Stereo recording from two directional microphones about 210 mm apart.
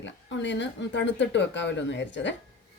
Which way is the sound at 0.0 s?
60° left (ahead or behind).